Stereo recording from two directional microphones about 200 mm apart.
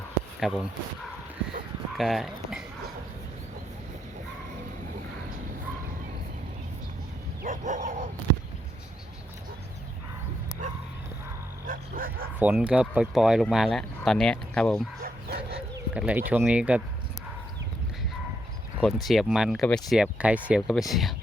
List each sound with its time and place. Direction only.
0.3 s speech: centre (ahead or behind)
2.0 s speech: centre (ahead or behind)
7.4 s bow-wow: 40° right (ahead or behind)
11.6 s bow-wow: 45° right (ahead or behind)
12.4 s speech: 5° right (ahead or behind)
15.0 s dog: 55° right (ahead or behind)
16.0 s speech: 5° right (ahead or behind)
18.8 s speech: centre (ahead or behind)